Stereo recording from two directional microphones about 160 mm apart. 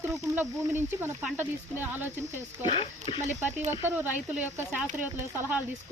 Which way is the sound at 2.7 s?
35° left (ahead or behind).